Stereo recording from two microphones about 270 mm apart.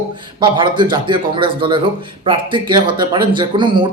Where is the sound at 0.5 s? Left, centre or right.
Centre.